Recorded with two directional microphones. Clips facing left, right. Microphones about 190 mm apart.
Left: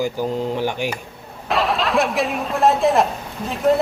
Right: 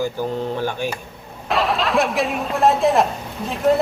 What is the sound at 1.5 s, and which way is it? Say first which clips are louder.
A woman's voice: even; centre (ahead or behind).